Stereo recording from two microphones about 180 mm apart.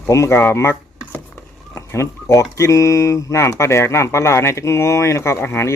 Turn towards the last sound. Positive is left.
turn(degrees=15)  # may be behind; listen again after turning